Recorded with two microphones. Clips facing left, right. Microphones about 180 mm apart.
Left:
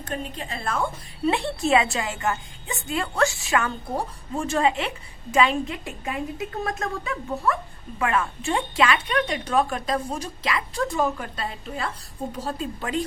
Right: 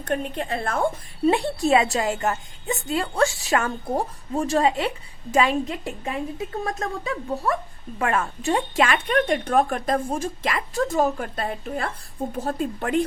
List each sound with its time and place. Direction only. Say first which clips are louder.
0.0 s a woman's voice: right 6 dB; 60° right (ahead or behind)
1.7 s a woman's voice: right 2 dB; 40° right (ahead or behind)
7.9 s a woman's voice: right 1 dB; 45° right (ahead or behind)